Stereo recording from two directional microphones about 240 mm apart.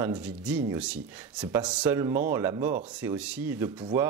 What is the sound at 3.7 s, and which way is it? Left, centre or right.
Speech, centre.